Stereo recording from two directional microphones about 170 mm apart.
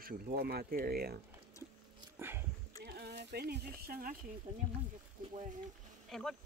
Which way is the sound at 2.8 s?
70° right (ahead or behind).